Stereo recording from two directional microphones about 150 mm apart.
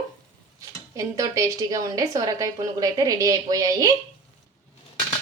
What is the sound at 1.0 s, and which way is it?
A woman's voice, 20° right (ahead or behind).